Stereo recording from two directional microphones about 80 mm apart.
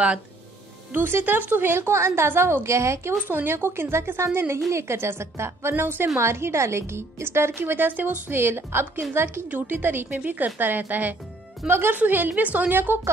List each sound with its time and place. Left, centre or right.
0.9 s a woman's voice: right
3.3 s a woman's voice: right